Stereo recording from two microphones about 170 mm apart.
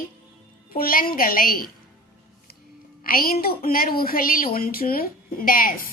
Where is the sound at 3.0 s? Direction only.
60° left (ahead or behind).